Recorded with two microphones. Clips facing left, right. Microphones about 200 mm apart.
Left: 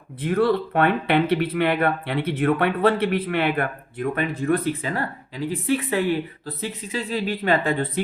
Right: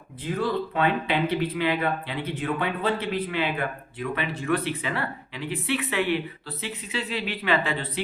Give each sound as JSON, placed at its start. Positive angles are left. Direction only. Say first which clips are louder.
{"t": 0.3, "sound": "speech", "louder": "left 6 dB", "side_deg": 65}